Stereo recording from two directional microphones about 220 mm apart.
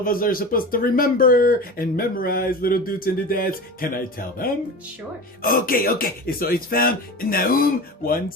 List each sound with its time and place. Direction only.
0.0 s speech: 40° left (ahead or behind)